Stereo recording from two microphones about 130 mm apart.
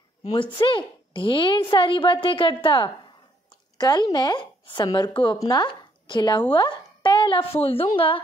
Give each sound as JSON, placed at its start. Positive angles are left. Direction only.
{"t": 0.3, "sound": "a woman's voice", "side_deg": 35}